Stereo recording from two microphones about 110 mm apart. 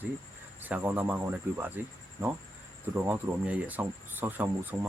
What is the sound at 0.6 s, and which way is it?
Speech, 15° right (ahead or behind).